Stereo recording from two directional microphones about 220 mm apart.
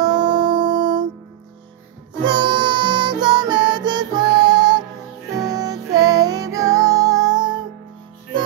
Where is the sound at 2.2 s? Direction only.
20° right (ahead or behind).